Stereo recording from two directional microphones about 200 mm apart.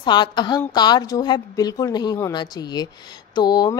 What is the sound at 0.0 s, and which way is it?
Speech, 20° left (ahead or behind).